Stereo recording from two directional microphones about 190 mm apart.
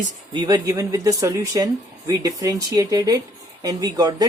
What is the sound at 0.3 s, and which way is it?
Speech, 20° right (ahead or behind).